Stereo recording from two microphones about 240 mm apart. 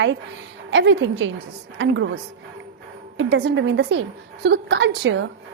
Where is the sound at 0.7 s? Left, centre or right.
Right.